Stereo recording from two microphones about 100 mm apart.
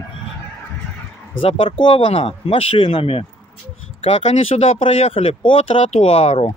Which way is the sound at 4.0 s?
80° left.